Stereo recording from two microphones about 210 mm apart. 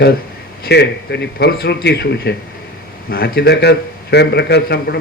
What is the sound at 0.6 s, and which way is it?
A man's voice, 50° left (ahead or behind).